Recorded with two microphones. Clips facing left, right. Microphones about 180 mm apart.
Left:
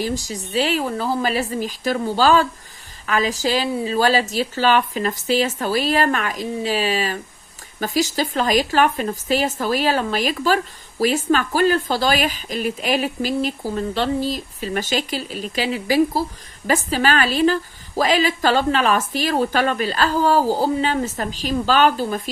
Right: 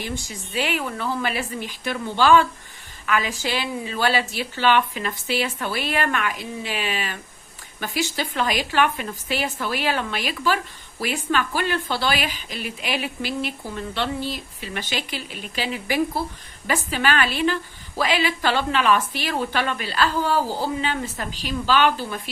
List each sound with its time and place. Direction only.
0.0 s a woman's voice: 40° left (ahead or behind)